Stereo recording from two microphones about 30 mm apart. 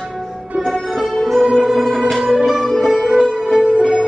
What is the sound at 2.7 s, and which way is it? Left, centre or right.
Music, centre.